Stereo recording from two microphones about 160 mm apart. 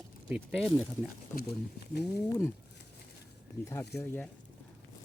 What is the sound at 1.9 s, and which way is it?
Speech, 90° left.